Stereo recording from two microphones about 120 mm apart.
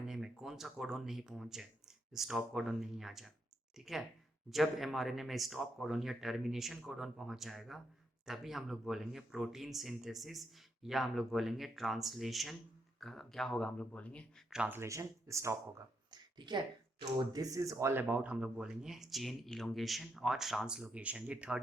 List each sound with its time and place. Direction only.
0.0 s speech: 5° right (ahead or behind)
14.5 s speech: 10° right (ahead or behind)
14.8 s speech: 25° right (ahead or behind)
16.4 s speech: 40° right (ahead or behind); by 21.6 s 10° right (ahead or behind)